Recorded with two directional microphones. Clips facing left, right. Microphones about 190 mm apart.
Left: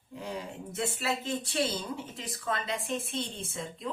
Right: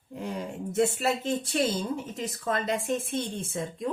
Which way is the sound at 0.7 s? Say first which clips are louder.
Right 7 dB; 45° right (ahead or behind).